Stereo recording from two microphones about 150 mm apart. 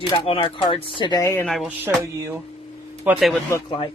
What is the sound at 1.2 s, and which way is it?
Speech, 15° left (ahead or behind).